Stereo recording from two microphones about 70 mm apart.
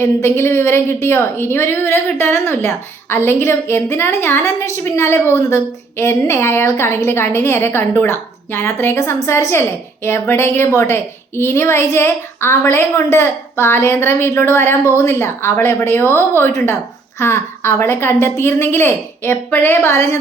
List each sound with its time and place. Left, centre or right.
0.0 s a woman's voice: left